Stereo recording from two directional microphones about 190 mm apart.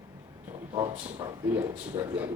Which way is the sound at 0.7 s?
15° right (ahead or behind).